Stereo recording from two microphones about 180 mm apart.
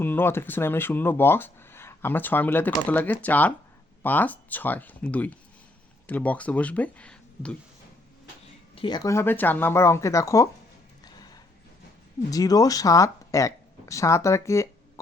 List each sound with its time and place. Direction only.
0.0 s speech: 10° left (ahead or behind)
8.7 s speech: 25° left (ahead or behind)
11.0 s a sound: 20° left (ahead or behind)
12.3 s speech: 20° left (ahead or behind)